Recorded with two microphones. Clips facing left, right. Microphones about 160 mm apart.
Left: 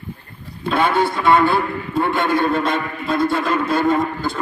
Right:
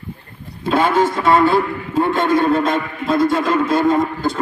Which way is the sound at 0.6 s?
40° right (ahead or behind).